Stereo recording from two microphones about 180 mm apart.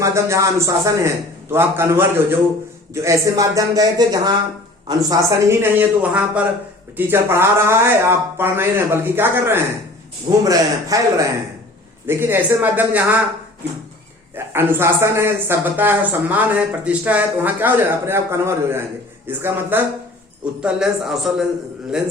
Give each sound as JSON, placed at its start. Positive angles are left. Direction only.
{"t": 0.0, "sound": "speech", "side_deg": -15}
{"t": 5.8, "sound": "speech", "side_deg": -5}
{"t": 14.3, "sound": "a man's voice", "side_deg": -10}